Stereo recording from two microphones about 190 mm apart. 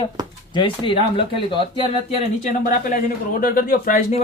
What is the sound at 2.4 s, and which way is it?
A man's voice, 45° left (ahead or behind).